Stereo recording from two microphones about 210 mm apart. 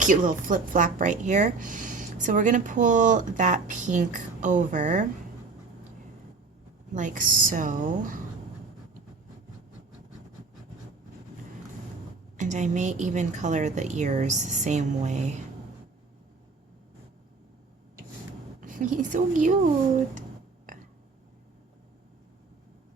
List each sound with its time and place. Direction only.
0.0 s speech: 40° right (ahead or behind)
6.9 s speech: 40° right (ahead or behind)
12.4 s speech: 35° right (ahead or behind)
18.6 s a woman's voice: 40° right (ahead or behind)